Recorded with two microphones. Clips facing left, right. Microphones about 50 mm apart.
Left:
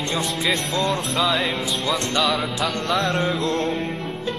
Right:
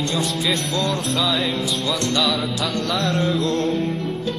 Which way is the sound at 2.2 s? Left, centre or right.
Centre.